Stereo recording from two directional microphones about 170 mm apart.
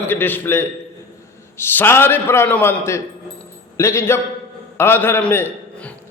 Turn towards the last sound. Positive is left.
turn(degrees=10)  # may be behind; listen again after turning